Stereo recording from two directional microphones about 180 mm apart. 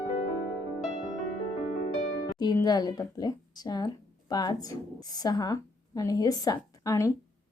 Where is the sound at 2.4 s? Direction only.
20° left (ahead or behind).